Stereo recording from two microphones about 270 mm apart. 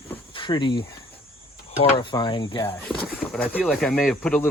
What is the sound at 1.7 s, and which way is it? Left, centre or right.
Speech, left.